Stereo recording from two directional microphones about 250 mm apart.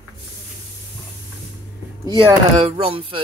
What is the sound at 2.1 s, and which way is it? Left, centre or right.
Speech, right.